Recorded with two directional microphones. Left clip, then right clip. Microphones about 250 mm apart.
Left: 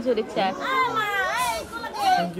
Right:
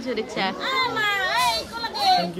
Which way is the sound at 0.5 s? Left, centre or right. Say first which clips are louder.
Even; left.